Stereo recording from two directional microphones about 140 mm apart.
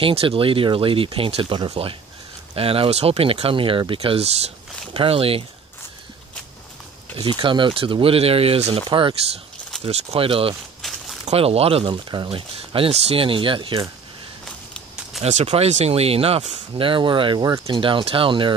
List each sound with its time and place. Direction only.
0.0 s speech: 45° right (ahead or behind)
7.2 s speech: 35° right (ahead or behind)
10.8 s a sound: centre (ahead or behind)
11.2 s speech: 45° right (ahead or behind)
14.4 s walk: centre (ahead or behind)
15.2 s speech: 55° right (ahead or behind)